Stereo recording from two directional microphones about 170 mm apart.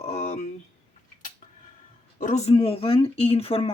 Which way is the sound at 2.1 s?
45° left (ahead or behind).